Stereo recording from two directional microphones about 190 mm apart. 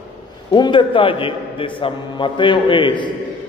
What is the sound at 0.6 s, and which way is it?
A man's voice, 25° left (ahead or behind).